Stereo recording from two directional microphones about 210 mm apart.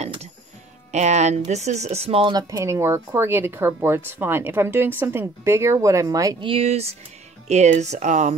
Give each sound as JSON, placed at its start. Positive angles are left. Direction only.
{"t": 0.0, "sound": "music", "side_deg": -30}
{"t": 0.9, "sound": "speech", "side_deg": -35}